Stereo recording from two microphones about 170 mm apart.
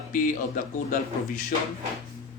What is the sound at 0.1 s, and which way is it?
Speech, 55° left (ahead or behind).